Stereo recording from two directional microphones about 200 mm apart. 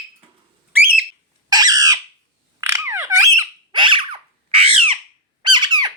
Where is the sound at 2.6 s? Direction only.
15° right (ahead or behind).